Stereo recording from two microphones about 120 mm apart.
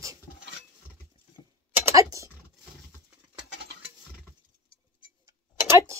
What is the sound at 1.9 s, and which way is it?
Typing, 25° right (ahead or behind).